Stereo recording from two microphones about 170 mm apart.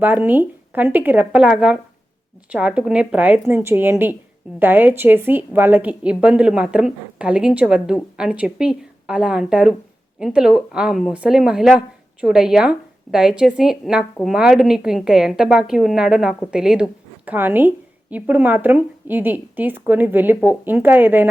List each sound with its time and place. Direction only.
0.0 s a woman's voice: 10° right (ahead or behind)